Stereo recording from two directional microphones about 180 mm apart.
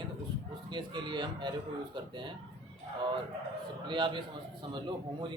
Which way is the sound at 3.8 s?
25° right (ahead or behind).